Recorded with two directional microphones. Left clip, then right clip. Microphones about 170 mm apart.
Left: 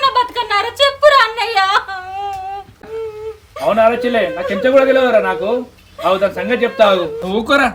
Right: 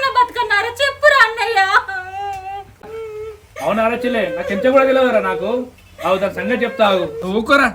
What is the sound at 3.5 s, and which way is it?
A man's voice, centre (ahead or behind).